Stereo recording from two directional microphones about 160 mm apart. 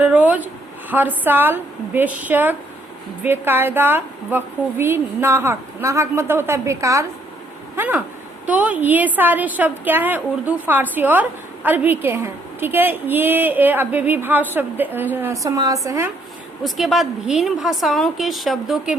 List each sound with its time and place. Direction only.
0.0 s a woman's voice: 10° right (ahead or behind)
16.6 s a woman's voice: centre (ahead or behind)